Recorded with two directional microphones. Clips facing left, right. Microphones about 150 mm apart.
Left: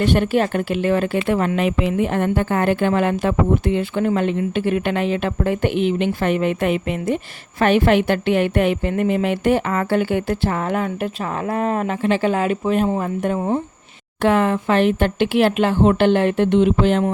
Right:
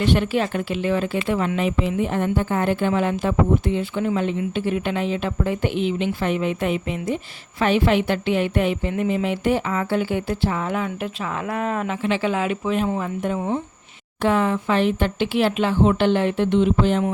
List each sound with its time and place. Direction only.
0.0 s speech: 50° left (ahead or behind)
14.2 s speech: 65° left (ahead or behind)